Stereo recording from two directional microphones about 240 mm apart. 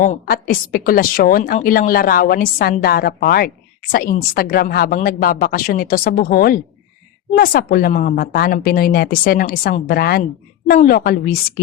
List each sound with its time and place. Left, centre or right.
0.0 s a woman's voice: left